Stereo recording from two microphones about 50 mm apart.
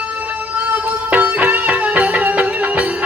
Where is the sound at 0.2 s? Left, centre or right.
Right.